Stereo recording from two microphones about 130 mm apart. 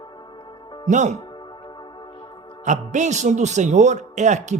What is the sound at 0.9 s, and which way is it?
Speech, 65° right (ahead or behind).